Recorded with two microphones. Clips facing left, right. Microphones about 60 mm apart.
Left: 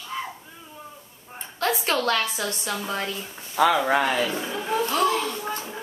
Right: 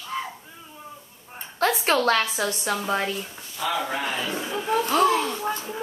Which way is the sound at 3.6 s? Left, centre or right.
Left.